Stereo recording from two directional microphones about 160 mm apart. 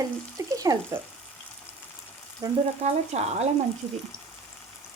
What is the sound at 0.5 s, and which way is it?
Frying, 20° right (ahead or behind).